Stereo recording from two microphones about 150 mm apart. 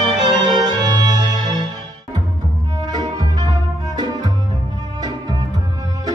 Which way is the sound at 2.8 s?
25° right (ahead or behind).